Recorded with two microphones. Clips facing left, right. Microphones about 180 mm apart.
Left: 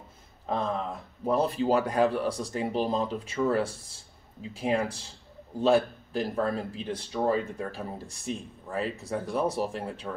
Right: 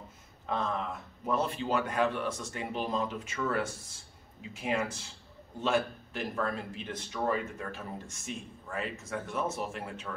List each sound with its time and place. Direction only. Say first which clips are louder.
0.5 s speech: left 3 dB; 35° left (ahead or behind)